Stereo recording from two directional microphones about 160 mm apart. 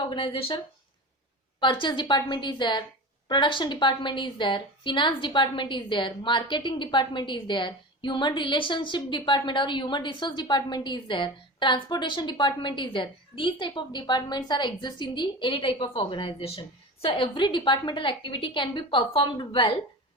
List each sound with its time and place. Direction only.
0.1 s a woman's voice: 35° left (ahead or behind)